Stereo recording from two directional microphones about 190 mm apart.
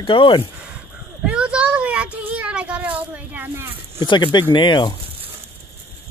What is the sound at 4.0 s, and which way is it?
Speech, 25° left (ahead or behind).